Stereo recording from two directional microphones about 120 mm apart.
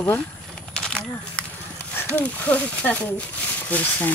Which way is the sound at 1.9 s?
15° left (ahead or behind).